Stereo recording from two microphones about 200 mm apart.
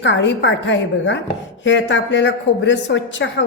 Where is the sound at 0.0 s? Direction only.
65° left (ahead or behind).